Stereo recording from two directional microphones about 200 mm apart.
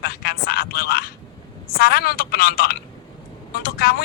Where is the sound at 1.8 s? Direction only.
50° left (ahead or behind).